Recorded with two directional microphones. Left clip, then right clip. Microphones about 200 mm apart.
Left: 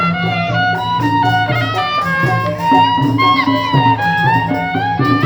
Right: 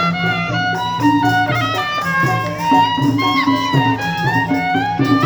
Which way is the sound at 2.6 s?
60° right (ahead or behind).